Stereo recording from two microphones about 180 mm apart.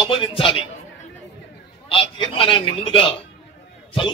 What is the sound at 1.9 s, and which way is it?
A man's voice, 30° left (ahead or behind).